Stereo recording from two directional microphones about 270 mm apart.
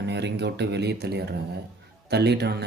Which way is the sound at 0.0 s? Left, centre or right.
Right.